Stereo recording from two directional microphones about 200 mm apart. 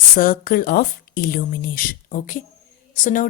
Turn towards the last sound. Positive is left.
turn(degrees=40)  # may be behind; listen again after turning